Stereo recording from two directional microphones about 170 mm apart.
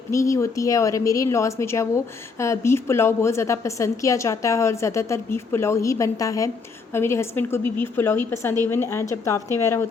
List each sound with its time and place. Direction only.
0.1 s a woman's voice: 20° left (ahead or behind)